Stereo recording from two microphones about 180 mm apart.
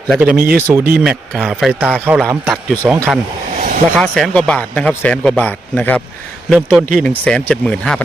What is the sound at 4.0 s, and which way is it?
A man's voice, 5° left (ahead or behind).